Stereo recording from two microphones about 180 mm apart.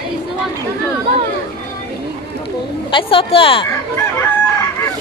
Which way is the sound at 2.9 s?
30° left (ahead or behind).